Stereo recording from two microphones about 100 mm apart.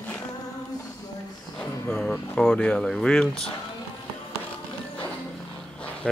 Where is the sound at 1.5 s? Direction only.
5° left (ahead or behind).